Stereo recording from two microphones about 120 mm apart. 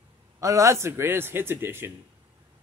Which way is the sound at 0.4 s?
25° right (ahead or behind).